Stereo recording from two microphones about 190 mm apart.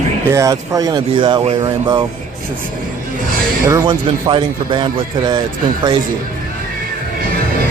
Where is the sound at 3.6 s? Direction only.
20° right (ahead or behind).